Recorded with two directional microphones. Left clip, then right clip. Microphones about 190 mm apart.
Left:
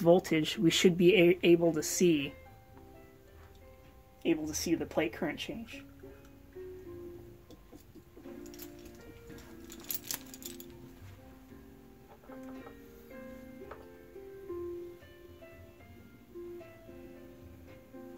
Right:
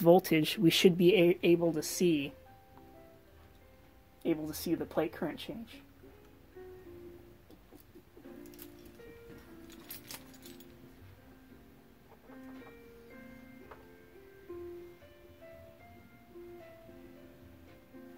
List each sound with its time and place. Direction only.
0.0 s speech: 30° right (ahead or behind); by 2.3 s 10° right (ahead or behind)
4.2 s speech: 30° right (ahead or behind)
10.1 s music: 30° left (ahead or behind)